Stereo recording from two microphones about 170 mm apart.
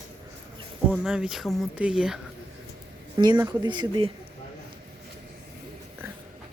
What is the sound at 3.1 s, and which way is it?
Speech, 25° right (ahead or behind).